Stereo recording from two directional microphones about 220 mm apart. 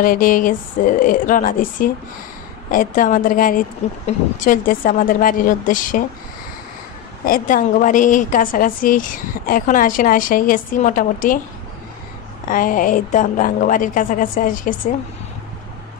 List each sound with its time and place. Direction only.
0.0 s a woman's voice: 40° left (ahead or behind)
7.2 s a woman's voice: 40° left (ahead or behind)
12.4 s a woman's voice: 40° left (ahead or behind)